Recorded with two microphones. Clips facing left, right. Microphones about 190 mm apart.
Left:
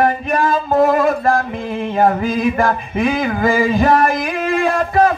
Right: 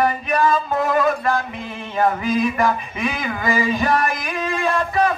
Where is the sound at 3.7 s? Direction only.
40° left (ahead or behind).